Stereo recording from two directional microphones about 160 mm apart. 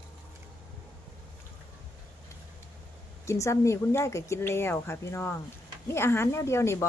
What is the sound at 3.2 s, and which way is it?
A woman's voice, 20° left (ahead or behind).